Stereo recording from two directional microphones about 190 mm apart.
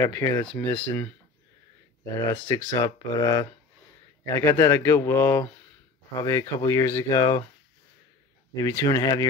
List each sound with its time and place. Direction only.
0.0 s a man's voice: 15° left (ahead or behind)
2.2 s a man's voice: 15° left (ahead or behind)
8.5 s speech: 15° left (ahead or behind)